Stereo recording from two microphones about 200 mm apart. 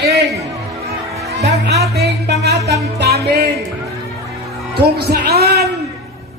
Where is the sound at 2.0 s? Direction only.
55° right (ahead or behind).